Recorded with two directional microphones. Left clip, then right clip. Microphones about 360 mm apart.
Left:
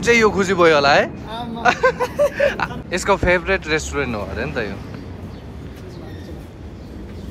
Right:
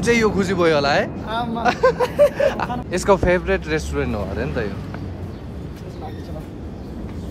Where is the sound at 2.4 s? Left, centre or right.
Centre.